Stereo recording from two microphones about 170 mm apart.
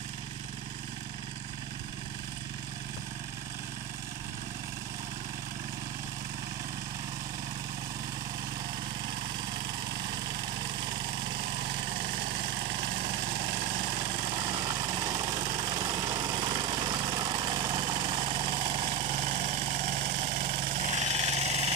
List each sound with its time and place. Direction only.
9.5 s lawn mower: 25° right (ahead or behind)
13.8 s vehicle: 30° right (ahead or behind)